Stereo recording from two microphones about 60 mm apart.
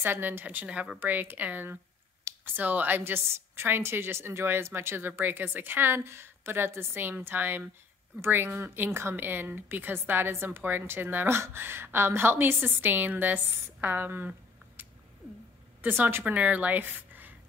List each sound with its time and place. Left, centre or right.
0.0 s a woman's voice: right
15.8 s a woman's voice: right